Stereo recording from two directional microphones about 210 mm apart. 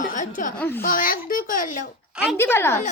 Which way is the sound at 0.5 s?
10° left (ahead or behind).